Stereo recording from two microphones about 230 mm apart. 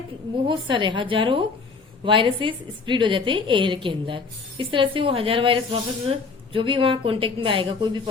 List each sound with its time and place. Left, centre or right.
0.4 s a woman's voice: right